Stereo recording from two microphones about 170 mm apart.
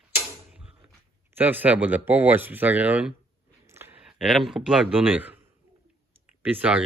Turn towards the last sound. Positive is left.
turn(degrees=-10)  # may be behind; listen again after turning